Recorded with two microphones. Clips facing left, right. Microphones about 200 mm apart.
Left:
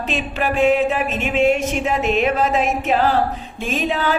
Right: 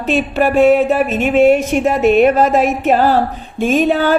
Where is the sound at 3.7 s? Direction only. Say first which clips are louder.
Right 8 dB; 50° right (ahead or behind).